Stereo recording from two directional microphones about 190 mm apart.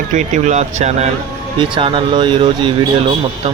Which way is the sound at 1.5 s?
25° right (ahead or behind).